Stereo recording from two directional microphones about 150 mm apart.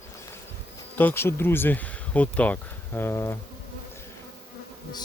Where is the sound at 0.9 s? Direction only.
15° left (ahead or behind).